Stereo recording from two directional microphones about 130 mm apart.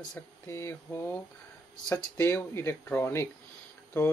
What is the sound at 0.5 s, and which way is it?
Speech, 20° left (ahead or behind).